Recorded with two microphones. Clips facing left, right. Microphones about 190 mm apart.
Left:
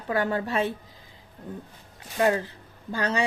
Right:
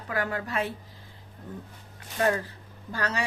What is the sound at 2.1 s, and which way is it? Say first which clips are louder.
A woman's voice: left 3 dB; 20° left (ahead or behind).